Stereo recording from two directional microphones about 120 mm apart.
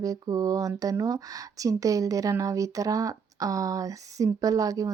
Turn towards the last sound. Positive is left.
turn(degrees=-30)  # may be behind; listen again after turning